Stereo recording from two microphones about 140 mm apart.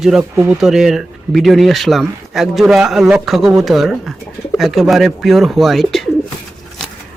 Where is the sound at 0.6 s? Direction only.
Centre (ahead or behind).